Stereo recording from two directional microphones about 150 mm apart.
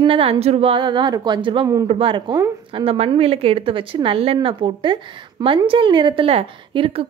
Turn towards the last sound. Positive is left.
turn(degrees=-40)  # may be behind; listen again after turning